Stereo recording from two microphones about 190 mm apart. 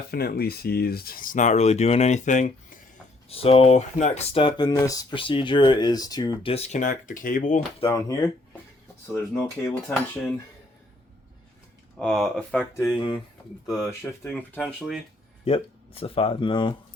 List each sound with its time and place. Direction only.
0.1 s speech: 55° left (ahead or behind); by 4.2 s 40° left (ahead or behind)
4.4 s speech: 25° left (ahead or behind); by 7.6 s 40° left (ahead or behind)
7.8 s speech: 20° left (ahead or behind)
9.1 s speech: 15° left (ahead or behind)
11.9 s speech: 5° left (ahead or behind)
15.4 s speech: 30° left (ahead or behind)